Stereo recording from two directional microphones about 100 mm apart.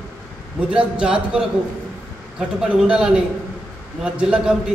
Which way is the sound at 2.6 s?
10° right (ahead or behind).